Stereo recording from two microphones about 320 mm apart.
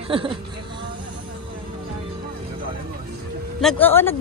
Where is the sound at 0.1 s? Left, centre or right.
Centre.